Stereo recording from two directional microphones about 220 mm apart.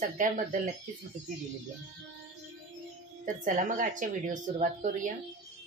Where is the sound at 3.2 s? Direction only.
35° right (ahead or behind).